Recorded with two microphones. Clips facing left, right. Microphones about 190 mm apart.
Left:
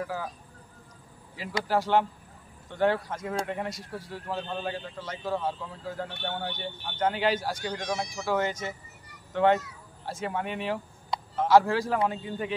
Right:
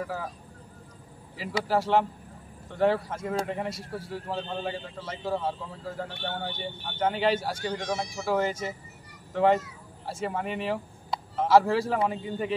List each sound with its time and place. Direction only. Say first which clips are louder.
0.0 s a man's voice: even; centre (ahead or behind)
1.3 s a man's voice: right 1 dB; centre (ahead or behind)